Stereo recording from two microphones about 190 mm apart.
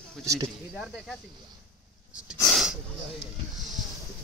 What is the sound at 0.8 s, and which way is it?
Speech, centre (ahead or behind).